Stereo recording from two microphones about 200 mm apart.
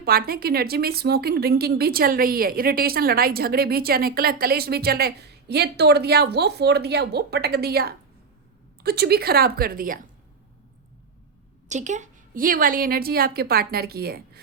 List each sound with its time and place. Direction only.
0.0 s a woman's voice: 50° right (ahead or behind)
11.7 s a woman's voice: 35° right (ahead or behind)